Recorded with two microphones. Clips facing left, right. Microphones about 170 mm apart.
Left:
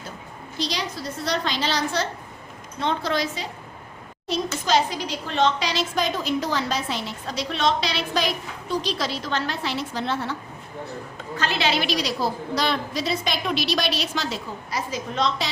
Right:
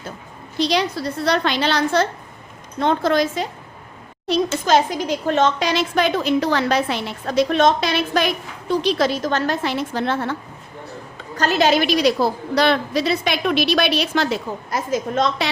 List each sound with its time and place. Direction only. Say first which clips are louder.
0.6 s a woman's voice: right 9 dB; 65° right (ahead or behind)
11.3 s a woman's voice: right 8 dB; 45° right (ahead or behind)